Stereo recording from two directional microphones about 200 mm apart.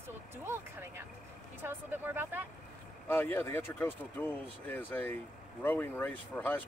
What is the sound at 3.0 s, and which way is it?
Speech, 10° left (ahead or behind).